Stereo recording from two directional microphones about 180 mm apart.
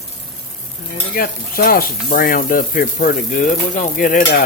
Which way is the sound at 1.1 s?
55° left (ahead or behind).